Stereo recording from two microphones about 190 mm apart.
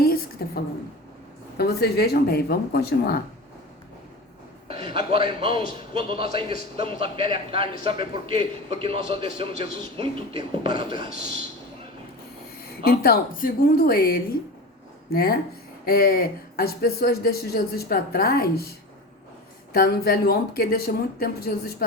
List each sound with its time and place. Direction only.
0.0 s a sound: 50° left (ahead or behind)
1.5 s speech: 60° left (ahead or behind)
4.7 s a man's voice: 30° right (ahead or behind)
12.8 s speech: 55° left (ahead or behind)
19.7 s speech: 55° left (ahead or behind)